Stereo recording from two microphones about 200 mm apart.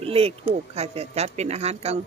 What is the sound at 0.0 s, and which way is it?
A woman's voice, 30° right (ahead or behind).